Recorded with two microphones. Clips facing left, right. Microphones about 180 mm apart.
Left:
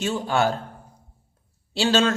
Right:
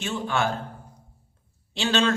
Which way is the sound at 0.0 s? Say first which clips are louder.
Left 4 dB; 40° left (ahead or behind).